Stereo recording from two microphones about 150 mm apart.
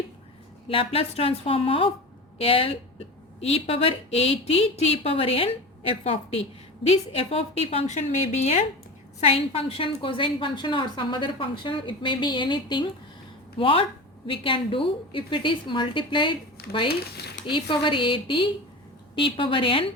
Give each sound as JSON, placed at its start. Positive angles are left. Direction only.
{"t": 0.7, "sound": "a woman's voice", "side_deg": 40}
{"t": 6.8, "sound": "a woman's voice", "side_deg": 40}
{"t": 16.6, "sound": "speech", "side_deg": 90}
{"t": 17.4, "sound": "a woman's voice", "side_deg": 35}